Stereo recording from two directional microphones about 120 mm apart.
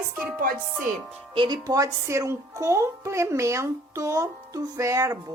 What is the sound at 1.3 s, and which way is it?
Speech, 40° right (ahead or behind).